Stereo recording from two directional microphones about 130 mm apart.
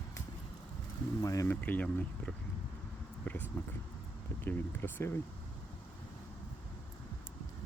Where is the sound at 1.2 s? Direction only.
25° left (ahead or behind).